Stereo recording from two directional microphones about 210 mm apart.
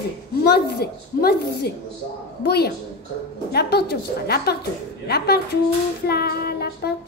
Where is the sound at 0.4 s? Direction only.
50° left (ahead or behind).